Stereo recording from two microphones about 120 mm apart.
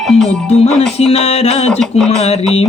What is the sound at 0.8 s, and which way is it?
Speech, 55° left (ahead or behind).